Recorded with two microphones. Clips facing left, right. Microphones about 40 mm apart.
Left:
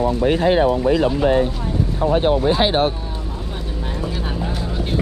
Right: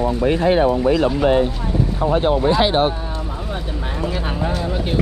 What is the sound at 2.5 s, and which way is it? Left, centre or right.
Speech, right.